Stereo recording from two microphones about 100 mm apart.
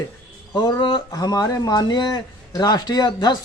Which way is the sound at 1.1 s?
40° left (ahead or behind).